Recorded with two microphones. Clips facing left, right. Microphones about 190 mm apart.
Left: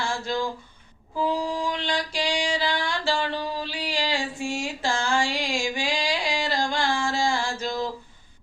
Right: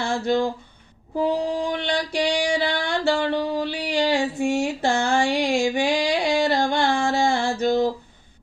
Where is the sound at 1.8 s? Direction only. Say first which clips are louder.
Right 4 dB; 60° right (ahead or behind).